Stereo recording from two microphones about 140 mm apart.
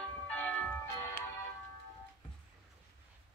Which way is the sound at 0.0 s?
10° left (ahead or behind).